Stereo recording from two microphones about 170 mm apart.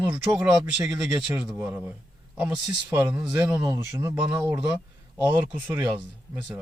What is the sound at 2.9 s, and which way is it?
Speech, 15° right (ahead or behind).